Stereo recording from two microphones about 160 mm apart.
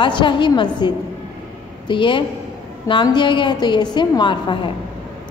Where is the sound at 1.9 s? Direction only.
30° left (ahead or behind).